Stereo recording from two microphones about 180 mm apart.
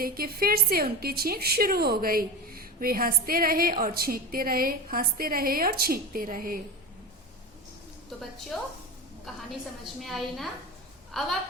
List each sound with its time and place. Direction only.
0.0 s a woman's voice: 55° right (ahead or behind)
8.5 s a woman's voice: centre (ahead or behind)
10.0 s a woman's voice: centre (ahead or behind)